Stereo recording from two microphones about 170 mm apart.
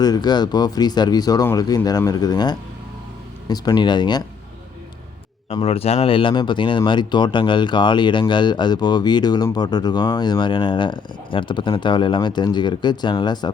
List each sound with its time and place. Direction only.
0.0 s speech: 25° left (ahead or behind)
5.5 s speech: 35° left (ahead or behind)